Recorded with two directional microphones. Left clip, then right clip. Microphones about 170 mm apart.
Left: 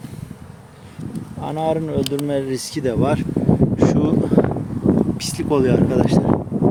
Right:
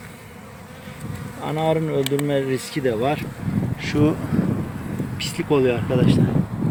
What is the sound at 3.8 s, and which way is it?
Wind noise, 25° left (ahead or behind).